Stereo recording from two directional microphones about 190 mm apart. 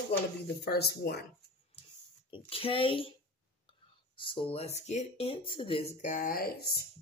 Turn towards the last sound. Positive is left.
turn(degrees=55)  # may be behind; listen again after turning